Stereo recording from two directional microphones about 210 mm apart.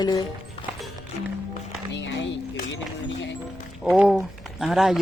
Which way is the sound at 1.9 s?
60° left (ahead or behind).